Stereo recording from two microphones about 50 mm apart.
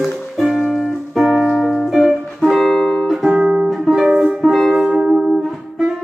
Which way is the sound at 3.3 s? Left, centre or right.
Centre.